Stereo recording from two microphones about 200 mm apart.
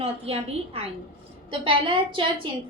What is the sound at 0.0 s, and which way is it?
A woman's voice, 30° right (ahead or behind).